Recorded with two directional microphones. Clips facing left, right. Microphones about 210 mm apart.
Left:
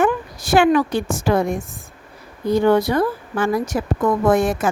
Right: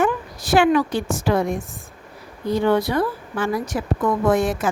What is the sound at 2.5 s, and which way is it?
A woman's voice, 45° left (ahead or behind).